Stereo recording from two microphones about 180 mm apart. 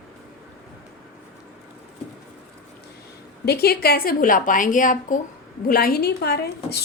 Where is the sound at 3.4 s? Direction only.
60° left (ahead or behind).